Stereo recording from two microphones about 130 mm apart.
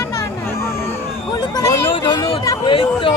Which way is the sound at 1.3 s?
30° left (ahead or behind).